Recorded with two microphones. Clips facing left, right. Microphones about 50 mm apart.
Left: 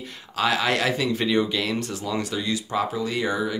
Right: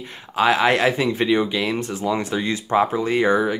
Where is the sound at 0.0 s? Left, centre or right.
Right.